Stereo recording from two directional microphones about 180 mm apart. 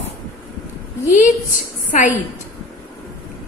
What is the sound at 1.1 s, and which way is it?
A woman's voice, 45° left (ahead or behind).